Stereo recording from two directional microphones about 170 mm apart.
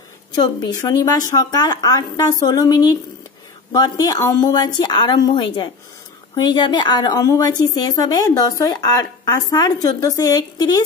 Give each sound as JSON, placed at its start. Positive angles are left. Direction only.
{"t": 0.3, "sound": "a woman's voice", "side_deg": 25}